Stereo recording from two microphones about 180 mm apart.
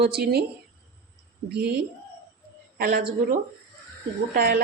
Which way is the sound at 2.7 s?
55° right (ahead or behind).